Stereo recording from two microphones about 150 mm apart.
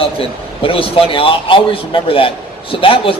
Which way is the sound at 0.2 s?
35° left (ahead or behind).